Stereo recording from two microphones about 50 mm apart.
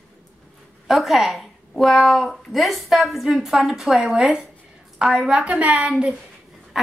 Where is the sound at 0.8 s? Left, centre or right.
Centre.